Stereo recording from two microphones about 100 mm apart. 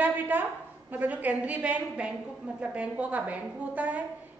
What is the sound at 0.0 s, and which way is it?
A woman's voice, 20° right (ahead or behind).